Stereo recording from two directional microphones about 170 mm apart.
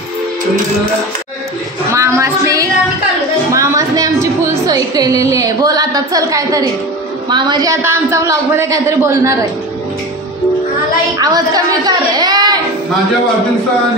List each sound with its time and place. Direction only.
1.9 s music: 15° right (ahead or behind)
3.5 s a sound: 20° right (ahead or behind)
7.2 s a man's voice: 25° right (ahead or behind)
11.1 s a woman's voice: 20° right (ahead or behind)